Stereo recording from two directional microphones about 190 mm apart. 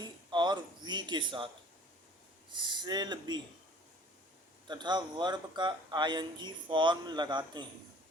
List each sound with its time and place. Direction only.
0.0 s a sound: 25° right (ahead or behind)
2.5 s speech: 25° right (ahead or behind)
4.7 s speech: 25° right (ahead or behind)